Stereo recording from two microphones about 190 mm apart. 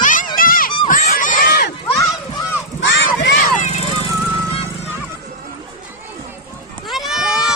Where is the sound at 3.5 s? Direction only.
40° left (ahead or behind).